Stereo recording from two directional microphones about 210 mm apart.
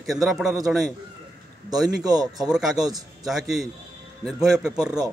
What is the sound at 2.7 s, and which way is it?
Speech, 20° right (ahead or behind).